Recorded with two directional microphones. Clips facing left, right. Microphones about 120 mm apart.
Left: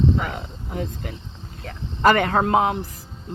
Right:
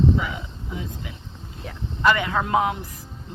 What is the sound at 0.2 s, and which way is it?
Speech, 55° left (ahead or behind).